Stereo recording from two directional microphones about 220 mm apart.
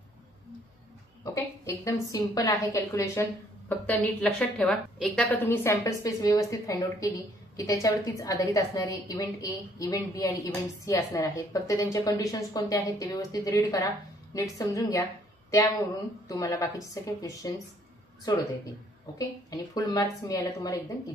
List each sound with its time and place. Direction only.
1.2 s a woman's voice: 15° left (ahead or behind)
16.3 s a woman's voice: 15° left (ahead or behind)